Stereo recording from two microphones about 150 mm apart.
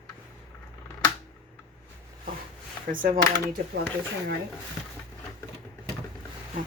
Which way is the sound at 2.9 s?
65° right (ahead or behind).